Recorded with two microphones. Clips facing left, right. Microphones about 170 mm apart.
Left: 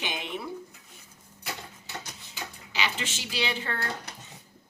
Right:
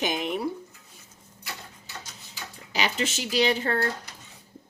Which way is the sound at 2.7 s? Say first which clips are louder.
Right 5 dB; 40° right (ahead or behind).